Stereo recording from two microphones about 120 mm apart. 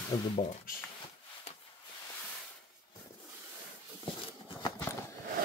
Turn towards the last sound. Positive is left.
turn(degrees=25)  # may be behind; listen again after turning